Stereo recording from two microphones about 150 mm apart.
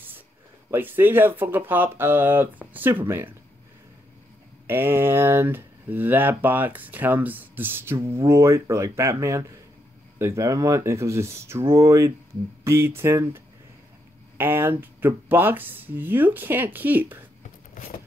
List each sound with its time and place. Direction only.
0.7 s speech: 15° right (ahead or behind)
4.6 s speech: 15° right (ahead or behind)